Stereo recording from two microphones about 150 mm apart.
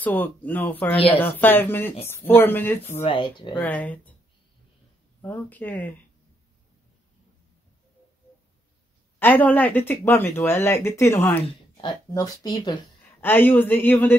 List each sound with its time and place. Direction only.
0.0 s speech: 10° left (ahead or behind)
3.0 s speech: 35° left (ahead or behind)
3.5 s speech: 10° left (ahead or behind)
5.2 s speech: 10° left (ahead or behind)
9.2 s speech: 10° left (ahead or behind)
11.7 s speech: 30° left (ahead or behind)
13.2 s speech: 15° left (ahead or behind)